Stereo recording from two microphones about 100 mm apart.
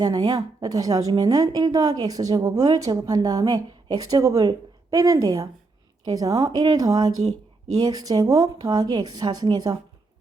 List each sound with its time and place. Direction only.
0.0 s speech: 40° right (ahead or behind)